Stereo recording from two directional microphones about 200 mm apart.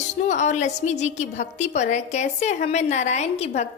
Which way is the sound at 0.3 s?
35° left (ahead or behind).